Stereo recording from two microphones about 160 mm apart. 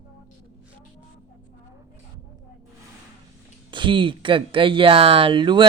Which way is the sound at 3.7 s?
30° right (ahead or behind).